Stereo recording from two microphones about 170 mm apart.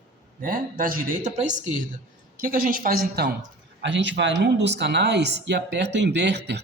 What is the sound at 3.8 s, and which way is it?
Speech, 90° right.